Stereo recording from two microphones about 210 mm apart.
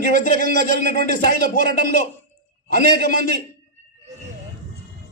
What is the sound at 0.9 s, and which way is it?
A man's voice, 50° right (ahead or behind).